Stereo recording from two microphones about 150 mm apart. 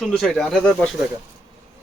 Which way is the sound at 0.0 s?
Centre (ahead or behind).